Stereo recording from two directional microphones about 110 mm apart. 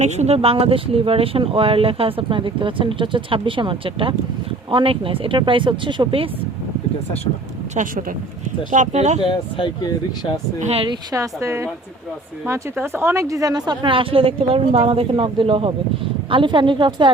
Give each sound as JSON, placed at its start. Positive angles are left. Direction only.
{"t": 0.0, "sound": "speech", "side_deg": -90}
{"t": 7.8, "sound": "speech", "side_deg": -90}
{"t": 9.3, "sound": "speech", "side_deg": 45}
{"t": 10.6, "sound": "speech", "side_deg": -70}
{"t": 11.1, "sound": "speech", "side_deg": -30}
{"t": 13.9, "sound": "speech", "side_deg": -55}